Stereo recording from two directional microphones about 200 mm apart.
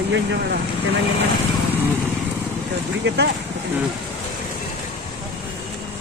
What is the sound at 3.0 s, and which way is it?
Speech, 60° right (ahead or behind).